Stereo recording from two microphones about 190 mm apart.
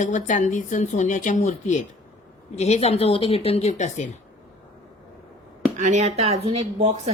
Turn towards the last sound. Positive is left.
turn(degrees=-35)  # may be behind; listen again after turning